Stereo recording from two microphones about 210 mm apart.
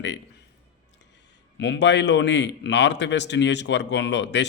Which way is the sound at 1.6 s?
55° left (ahead or behind).